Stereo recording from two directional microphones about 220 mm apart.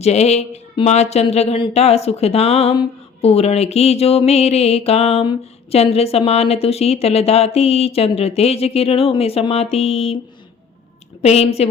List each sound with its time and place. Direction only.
0.0 s a woman's voice: 30° left (ahead or behind)
11.2 s a woman's voice: 30° left (ahead or behind)